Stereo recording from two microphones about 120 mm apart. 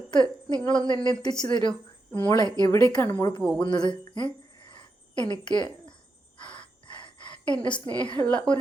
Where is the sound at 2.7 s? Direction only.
20° left (ahead or behind).